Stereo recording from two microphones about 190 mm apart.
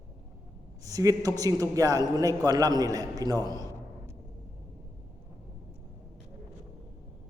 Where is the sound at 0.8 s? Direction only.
20° right (ahead or behind).